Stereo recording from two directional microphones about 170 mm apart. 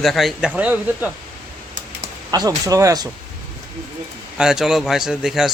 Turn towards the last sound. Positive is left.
turn(degrees=-5)  # may be behind; listen again after turning